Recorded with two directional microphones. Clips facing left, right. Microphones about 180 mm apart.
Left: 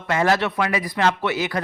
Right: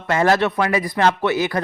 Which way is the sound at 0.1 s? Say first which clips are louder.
Right 3 dB; 45° right (ahead or behind).